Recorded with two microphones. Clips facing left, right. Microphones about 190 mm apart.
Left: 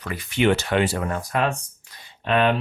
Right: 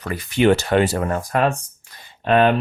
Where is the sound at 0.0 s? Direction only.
40° right (ahead or behind).